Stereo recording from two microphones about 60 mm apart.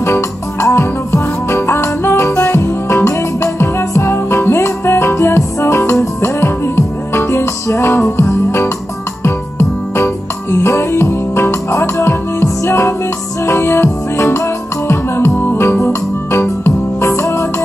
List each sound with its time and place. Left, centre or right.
0.0 s music: left